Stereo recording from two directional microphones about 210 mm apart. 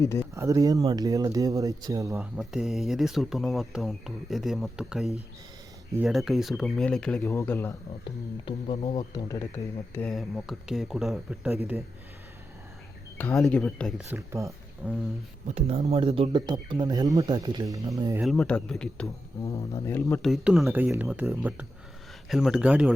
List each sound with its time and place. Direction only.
0.0 s speech: 15° left (ahead or behind)
0.3 s speech: 15° right (ahead or behind)
2.1 s speech: centre (ahead or behind)
8.4 s speech: 25° left (ahead or behind)
9.9 s speech: 5° left (ahead or behind)
13.1 s speech: 10° left (ahead or behind)
14.0 s speech: 15° right (ahead or behind)
15.4 s speech: 30° right (ahead or behind)
18.2 s speech: centre (ahead or behind)
19.4 s speech: 15° left (ahead or behind)
20.2 s speech: centre (ahead or behind)